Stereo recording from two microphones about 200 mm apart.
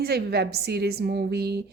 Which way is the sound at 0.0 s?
55° right (ahead or behind).